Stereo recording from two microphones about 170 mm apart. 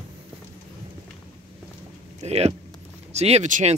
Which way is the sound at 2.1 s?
40° right (ahead or behind).